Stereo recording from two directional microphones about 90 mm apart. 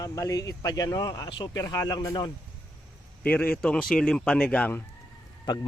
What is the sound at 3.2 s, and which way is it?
Speech, 20° left (ahead or behind).